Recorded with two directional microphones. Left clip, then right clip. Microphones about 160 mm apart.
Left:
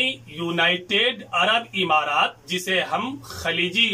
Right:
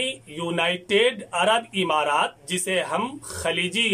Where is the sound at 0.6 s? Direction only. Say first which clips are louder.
Left 1 dB; 40° right (ahead or behind).